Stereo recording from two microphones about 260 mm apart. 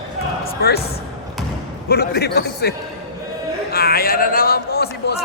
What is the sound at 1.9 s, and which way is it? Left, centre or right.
A man's voice, left.